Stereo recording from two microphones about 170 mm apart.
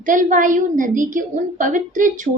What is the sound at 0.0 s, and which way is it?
A woman's voice, 50° right (ahead or behind).